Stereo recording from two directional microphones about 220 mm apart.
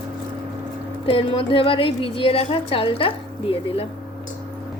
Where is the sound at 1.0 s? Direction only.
25° left (ahead or behind).